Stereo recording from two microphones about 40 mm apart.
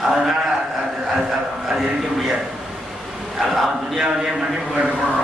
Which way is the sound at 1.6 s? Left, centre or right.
Centre.